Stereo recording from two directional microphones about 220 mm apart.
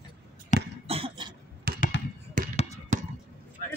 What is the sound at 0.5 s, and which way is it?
Cough, 35° left (ahead or behind).